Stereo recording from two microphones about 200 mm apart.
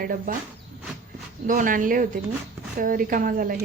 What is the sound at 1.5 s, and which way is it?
Speech, 40° right (ahead or behind).